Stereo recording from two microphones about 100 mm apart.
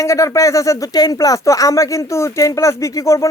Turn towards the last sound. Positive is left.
turn(degrees=30)  # may be behind; listen again after turning